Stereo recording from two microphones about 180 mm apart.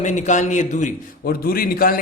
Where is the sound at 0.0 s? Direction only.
40° left (ahead or behind).